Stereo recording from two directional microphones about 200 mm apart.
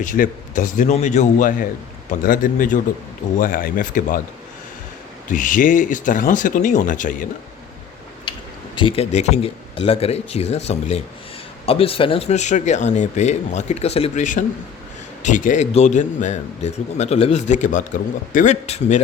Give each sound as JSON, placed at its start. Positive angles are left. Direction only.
{"t": 0.0, "sound": "speech", "side_deg": 40}
{"t": 5.3, "sound": "speech", "side_deg": 40}
{"t": 8.7, "sound": "speech", "side_deg": 25}